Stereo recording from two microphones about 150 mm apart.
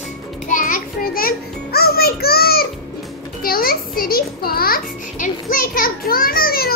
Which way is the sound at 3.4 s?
80° left.